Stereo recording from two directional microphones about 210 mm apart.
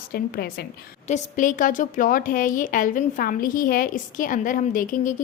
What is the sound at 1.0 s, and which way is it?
A woman's voice, 35° left (ahead or behind).